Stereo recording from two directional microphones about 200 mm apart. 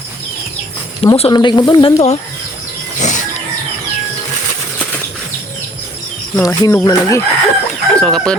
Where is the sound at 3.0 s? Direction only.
35° left (ahead or behind).